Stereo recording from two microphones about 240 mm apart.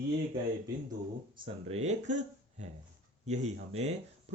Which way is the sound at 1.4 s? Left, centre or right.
Right.